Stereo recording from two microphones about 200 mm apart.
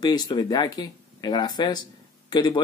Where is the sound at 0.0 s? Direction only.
20° left (ahead or behind).